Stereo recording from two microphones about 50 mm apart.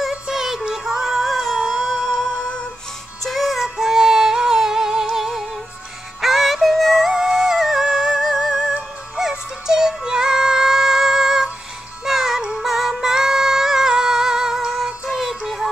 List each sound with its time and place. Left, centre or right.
0.3 s music: centre
3.3 s music: centre